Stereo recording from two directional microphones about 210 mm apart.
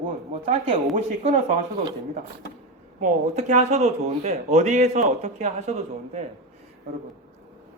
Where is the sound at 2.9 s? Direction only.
35° right (ahead or behind).